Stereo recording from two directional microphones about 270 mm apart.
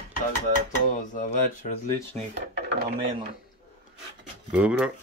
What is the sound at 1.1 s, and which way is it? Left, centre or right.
Speech, left.